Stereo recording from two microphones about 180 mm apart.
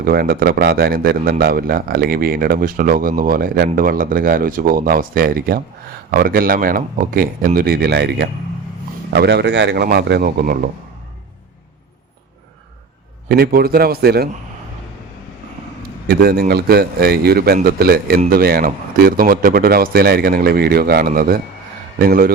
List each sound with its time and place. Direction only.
0.0 s speech: 55° right (ahead or behind); by 9.8 s 75° right (ahead or behind)
9.8 s speech: 60° right (ahead or behind)
13.2 s speech: 60° right (ahead or behind)
16.0 s speech: 60° right (ahead or behind)